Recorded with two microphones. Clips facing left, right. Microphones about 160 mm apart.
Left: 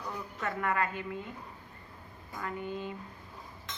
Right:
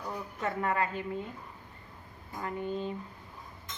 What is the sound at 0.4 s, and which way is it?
Speech, 30° right (ahead or behind).